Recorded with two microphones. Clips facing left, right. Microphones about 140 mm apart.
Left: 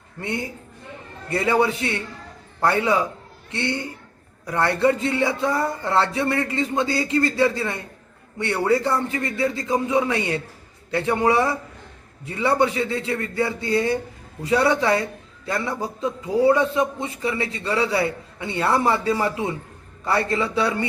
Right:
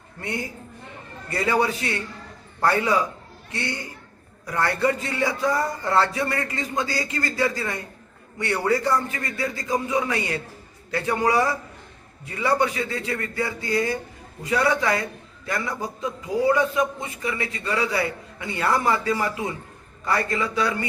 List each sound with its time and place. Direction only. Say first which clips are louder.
0.2 s a man's voice: left 2 dB; 25° left (ahead or behind)